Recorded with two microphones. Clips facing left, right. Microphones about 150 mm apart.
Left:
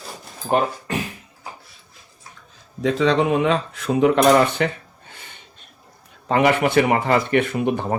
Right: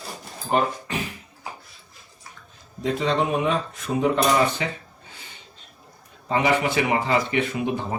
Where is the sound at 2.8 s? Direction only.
85° left; by 4.7 s 65° left (ahead or behind).